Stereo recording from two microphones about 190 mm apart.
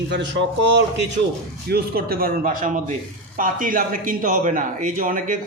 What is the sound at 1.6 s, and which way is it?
A man's voice, 55° right (ahead or behind).